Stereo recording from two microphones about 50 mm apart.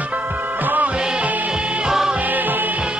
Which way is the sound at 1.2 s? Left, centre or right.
Right.